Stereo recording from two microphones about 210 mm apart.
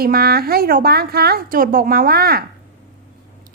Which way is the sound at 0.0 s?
45° right (ahead or behind).